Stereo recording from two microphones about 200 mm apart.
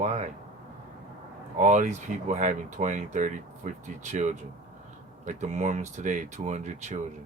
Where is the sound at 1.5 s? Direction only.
35° right (ahead or behind).